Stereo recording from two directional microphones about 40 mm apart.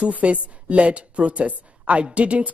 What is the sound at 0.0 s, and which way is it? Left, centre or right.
A woman's voice, right.